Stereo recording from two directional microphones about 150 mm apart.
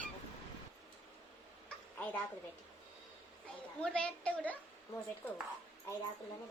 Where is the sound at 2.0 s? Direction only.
10° left (ahead or behind).